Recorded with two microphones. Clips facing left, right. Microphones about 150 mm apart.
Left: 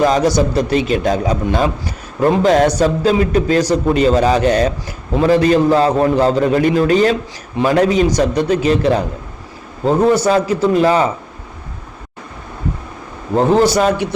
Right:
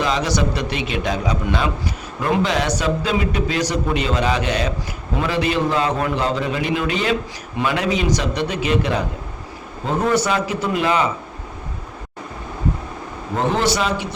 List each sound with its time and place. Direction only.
0.0 s a man's voice: 45° left (ahead or behind)
10.2 s a man's voice: 35° left (ahead or behind)
13.3 s a man's voice: 35° left (ahead or behind)